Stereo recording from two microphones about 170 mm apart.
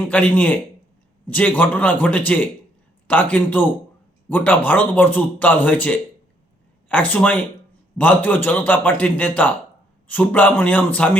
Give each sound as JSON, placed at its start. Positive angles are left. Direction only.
{"t": 0.1, "sound": "speech", "side_deg": 10}